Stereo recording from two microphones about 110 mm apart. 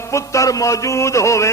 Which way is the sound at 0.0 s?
25° left (ahead or behind).